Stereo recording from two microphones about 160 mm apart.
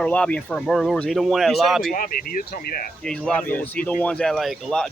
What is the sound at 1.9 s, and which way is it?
Speech, 60° left (ahead or behind).